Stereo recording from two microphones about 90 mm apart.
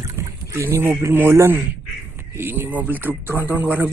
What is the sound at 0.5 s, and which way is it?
Speech, 30° right (ahead or behind).